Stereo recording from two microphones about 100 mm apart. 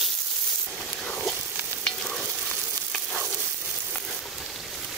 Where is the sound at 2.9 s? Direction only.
5° left (ahead or behind).